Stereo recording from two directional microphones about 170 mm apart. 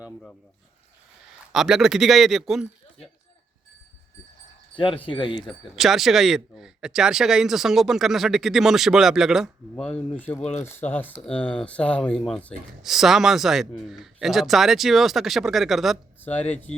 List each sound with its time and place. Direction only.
1.5 s speech: 5° right (ahead or behind)
4.7 s speech: 30° left (ahead or behind)
5.5 s speech: centre (ahead or behind)
16.2 s speech: 10° left (ahead or behind)